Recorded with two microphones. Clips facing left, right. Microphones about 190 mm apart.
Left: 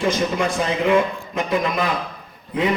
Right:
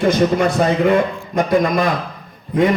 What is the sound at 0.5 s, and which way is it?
A man's voice, 45° right (ahead or behind).